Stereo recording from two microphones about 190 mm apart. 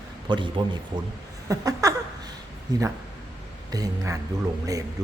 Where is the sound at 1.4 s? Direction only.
20° right (ahead or behind).